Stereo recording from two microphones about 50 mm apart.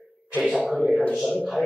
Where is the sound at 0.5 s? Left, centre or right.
Centre.